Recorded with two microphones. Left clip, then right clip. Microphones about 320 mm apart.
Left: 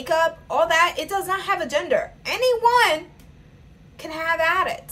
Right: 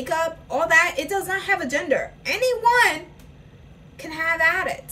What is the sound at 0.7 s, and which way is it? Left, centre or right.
A woman's voice, centre.